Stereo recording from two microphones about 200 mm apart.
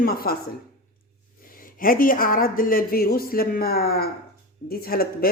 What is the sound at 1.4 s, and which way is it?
Speech, 45° left (ahead or behind).